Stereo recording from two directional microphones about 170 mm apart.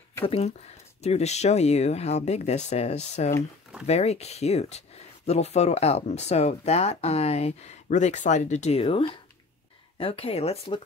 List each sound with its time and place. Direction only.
0.2 s speech: 35° left (ahead or behind)